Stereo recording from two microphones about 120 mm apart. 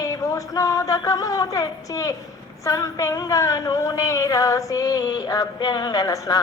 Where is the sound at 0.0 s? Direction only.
30° left (ahead or behind).